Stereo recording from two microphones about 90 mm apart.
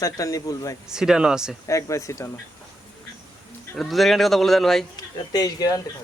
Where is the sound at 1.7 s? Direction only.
35° left (ahead or behind).